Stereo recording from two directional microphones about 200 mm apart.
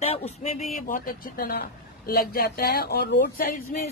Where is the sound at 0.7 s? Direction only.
45° left (ahead or behind).